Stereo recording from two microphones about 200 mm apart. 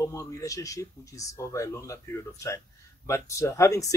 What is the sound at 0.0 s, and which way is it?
Speech, 15° left (ahead or behind).